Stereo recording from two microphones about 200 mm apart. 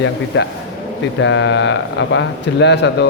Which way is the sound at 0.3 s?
65° left (ahead or behind).